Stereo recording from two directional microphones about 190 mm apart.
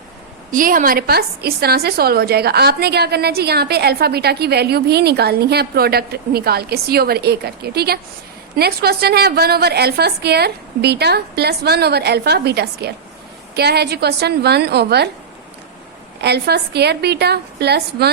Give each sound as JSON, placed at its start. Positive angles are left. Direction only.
{"t": 0.5, "sound": "a woman's voice", "side_deg": -45}
{"t": 16.2, "sound": "a woman's voice", "side_deg": -60}